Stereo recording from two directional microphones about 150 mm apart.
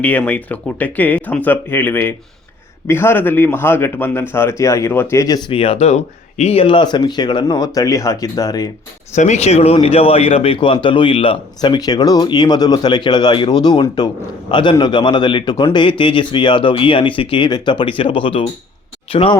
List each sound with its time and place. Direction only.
0.0 s a man's voice: 10° left (ahead or behind)
9.1 s a man's voice: 50° left (ahead or behind)